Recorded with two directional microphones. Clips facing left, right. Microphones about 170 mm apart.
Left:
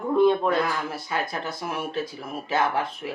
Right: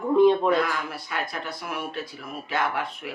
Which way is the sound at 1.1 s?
25° left (ahead or behind).